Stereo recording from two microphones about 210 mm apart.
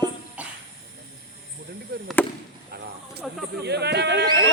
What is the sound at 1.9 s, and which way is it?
Speech, 50° right (ahead or behind).